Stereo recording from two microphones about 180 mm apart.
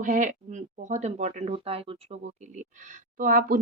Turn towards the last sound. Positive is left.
turn(degrees=-50)  # may be behind; listen again after turning